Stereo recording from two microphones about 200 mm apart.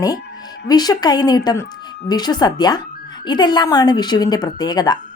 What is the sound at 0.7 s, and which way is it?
A woman's voice, 20° left (ahead or behind).